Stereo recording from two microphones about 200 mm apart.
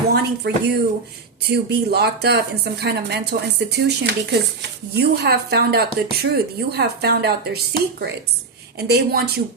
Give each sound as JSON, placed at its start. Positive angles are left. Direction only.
{"t": 0.1, "sound": "speech", "side_deg": -55}